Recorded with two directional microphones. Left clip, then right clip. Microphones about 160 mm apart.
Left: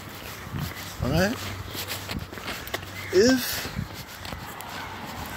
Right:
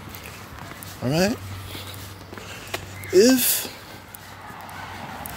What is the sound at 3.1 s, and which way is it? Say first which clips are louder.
Speech: right 4 dB; 35° right (ahead or behind).